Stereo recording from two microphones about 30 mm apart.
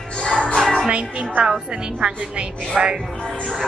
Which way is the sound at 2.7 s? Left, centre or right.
Centre.